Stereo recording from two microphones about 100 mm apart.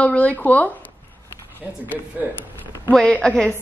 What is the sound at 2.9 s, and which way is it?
Speech, 10° left (ahead or behind).